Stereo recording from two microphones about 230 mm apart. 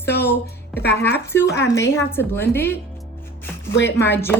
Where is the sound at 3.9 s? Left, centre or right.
Centre.